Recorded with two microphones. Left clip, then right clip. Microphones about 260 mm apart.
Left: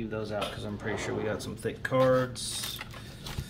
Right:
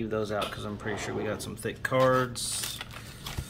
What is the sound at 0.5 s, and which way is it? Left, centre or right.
Speech, centre.